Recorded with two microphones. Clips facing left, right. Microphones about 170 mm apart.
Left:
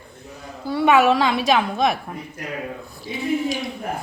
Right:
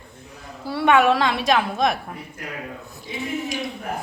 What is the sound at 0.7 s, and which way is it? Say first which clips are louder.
A woman's voice: left 1 dB; centre (ahead or behind).